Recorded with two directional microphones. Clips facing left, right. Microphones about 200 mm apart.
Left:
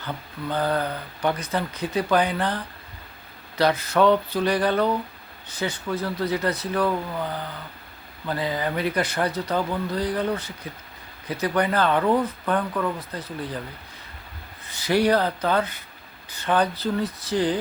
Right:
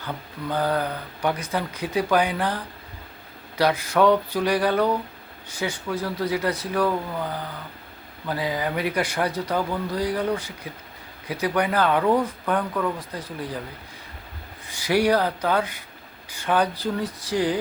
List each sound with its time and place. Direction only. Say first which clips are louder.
0.5 s speech: even; 10° right (ahead or behind)
14.7 s speech: even; 10° right (ahead or behind)